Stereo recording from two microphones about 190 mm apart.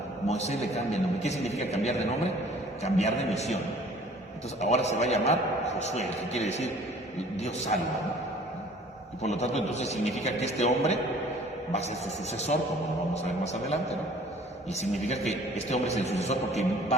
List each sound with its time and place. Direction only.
0.3 s a man's voice: 35° left (ahead or behind)
4.6 s a man's voice: 35° left (ahead or behind)
9.2 s a man's voice: 35° left (ahead or behind)